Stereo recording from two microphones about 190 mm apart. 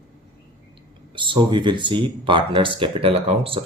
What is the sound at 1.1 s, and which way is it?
Speech, 25° right (ahead or behind).